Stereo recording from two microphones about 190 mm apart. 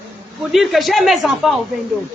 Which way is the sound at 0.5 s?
Centre (ahead or behind).